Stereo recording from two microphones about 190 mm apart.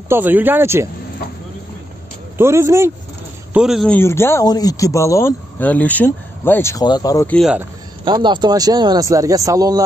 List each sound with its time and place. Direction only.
0.1 s speech: 10° right (ahead or behind)
2.3 s speech: 15° right (ahead or behind)
3.5 s speech: centre (ahead or behind)
4.0 s speech: 15° left (ahead or behind)
7.2 s speech: 5° left (ahead or behind)
8.0 s speech: 25° right (ahead or behind)